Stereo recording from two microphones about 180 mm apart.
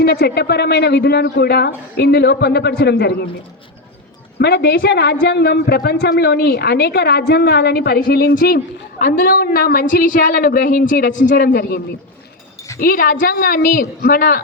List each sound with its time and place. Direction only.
0.0 s a woman's voice: 65° left (ahead or behind)
4.4 s a woman's voice: 65° left (ahead or behind)
12.8 s a woman's voice: 55° left (ahead or behind)